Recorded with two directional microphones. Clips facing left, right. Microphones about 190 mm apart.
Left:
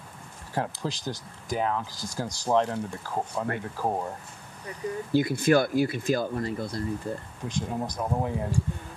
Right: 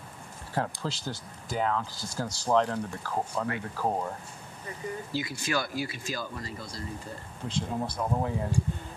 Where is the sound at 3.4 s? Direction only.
10° left (ahead or behind).